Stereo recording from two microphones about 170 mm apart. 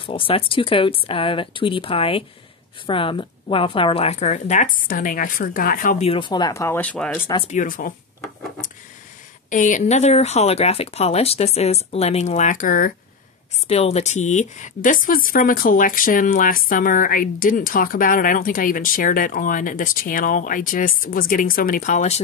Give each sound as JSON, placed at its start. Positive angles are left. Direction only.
{"t": 0.0, "sound": "a woman's voice", "side_deg": 30}
{"t": 6.0, "sound": "speech", "side_deg": 30}
{"t": 7.4, "sound": "a woman's voice", "side_deg": 50}
{"t": 9.5, "sound": "speech", "side_deg": 50}
{"t": 13.7, "sound": "a woman's voice", "side_deg": 40}